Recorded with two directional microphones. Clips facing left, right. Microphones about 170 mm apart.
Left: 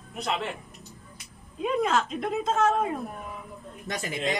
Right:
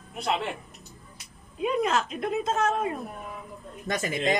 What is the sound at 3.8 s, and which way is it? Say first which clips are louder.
Speech: right 3 dB; 50° right (ahead or behind).